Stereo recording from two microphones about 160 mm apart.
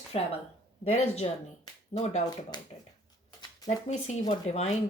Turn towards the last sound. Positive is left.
turn(degrees=45)  # may be behind; listen again after turning